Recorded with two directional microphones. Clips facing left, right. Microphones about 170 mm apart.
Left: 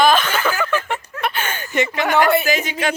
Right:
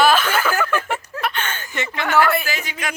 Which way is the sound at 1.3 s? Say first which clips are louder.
Left 3 dB; 10° left (ahead or behind).